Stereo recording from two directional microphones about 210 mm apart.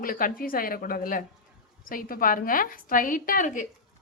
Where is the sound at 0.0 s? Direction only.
40° left (ahead or behind).